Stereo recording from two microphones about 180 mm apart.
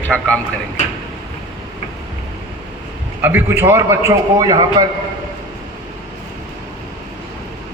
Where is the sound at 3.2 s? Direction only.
10° right (ahead or behind).